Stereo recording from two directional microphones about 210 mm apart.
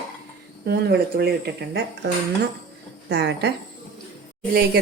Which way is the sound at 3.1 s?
55° right (ahead or behind).